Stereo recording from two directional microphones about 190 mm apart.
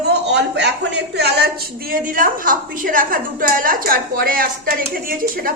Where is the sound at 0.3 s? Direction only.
65° right (ahead or behind).